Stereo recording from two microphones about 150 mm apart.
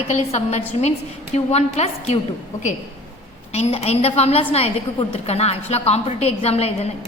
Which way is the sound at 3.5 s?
45° left (ahead or behind).